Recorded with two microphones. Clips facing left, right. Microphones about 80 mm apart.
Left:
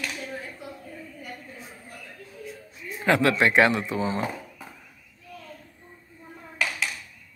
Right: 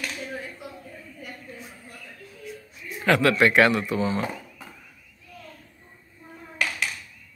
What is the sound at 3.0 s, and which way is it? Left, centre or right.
Speech, centre.